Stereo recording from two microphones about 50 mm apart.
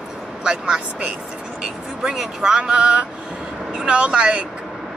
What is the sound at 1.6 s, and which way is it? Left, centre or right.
Speech, centre.